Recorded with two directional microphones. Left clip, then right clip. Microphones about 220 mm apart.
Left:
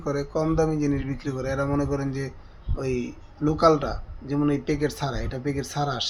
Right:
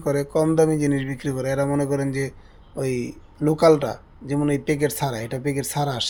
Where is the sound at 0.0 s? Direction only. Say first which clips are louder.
Right 5 dB; 35° right (ahead or behind).